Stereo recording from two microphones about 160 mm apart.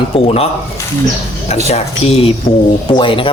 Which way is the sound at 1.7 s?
40° left (ahead or behind).